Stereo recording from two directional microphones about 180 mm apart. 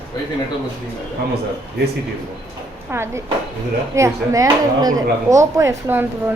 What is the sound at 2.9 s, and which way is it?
Speech, 15° right (ahead or behind).